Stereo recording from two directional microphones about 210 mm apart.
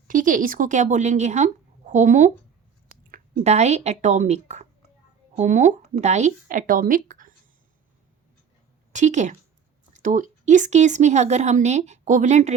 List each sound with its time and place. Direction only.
0.1 s a woman's voice: 40° right (ahead or behind)
8.9 s a woman's voice: 35° right (ahead or behind)